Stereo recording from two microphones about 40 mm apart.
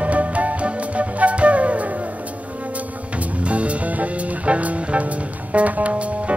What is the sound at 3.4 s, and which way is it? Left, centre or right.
Music, right.